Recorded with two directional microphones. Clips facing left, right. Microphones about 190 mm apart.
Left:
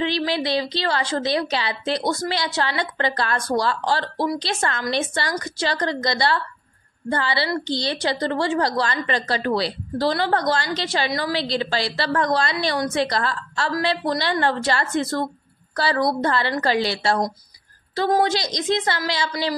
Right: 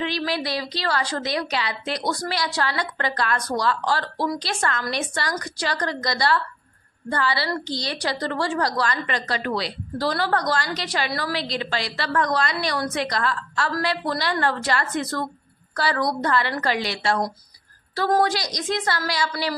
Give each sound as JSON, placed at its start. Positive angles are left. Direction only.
{"t": 0.0, "sound": "a woman's voice", "side_deg": 25}
{"t": 11.3, "sound": "a woman's voice", "side_deg": 30}
{"t": 13.7, "sound": "a woman's voice", "side_deg": 20}
{"t": 18.2, "sound": "a woman's voice", "side_deg": 25}